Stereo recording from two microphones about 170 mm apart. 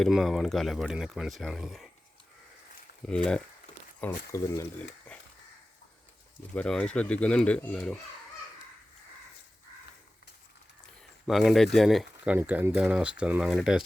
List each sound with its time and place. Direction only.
0.0 s speech: centre (ahead or behind)
3.1 s speech: 5° left (ahead or behind)
4.3 s speech: 20° left (ahead or behind)
6.6 s speech: 5° left (ahead or behind)
11.3 s speech: centre (ahead or behind)